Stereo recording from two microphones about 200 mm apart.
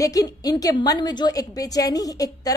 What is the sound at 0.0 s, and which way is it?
A woman's voice, 15° left (ahead or behind).